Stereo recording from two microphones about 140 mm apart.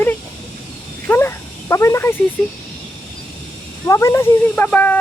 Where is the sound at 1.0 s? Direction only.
15° left (ahead or behind).